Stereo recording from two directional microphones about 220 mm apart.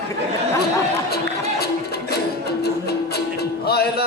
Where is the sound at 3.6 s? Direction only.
45° left (ahead or behind).